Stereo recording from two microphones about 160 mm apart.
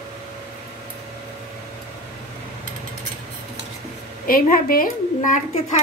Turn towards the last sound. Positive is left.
turn(degrees=55)  # may be behind; listen again after turning